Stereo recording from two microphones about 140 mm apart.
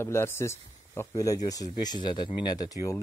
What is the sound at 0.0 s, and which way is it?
Speech, 15° left (ahead or behind).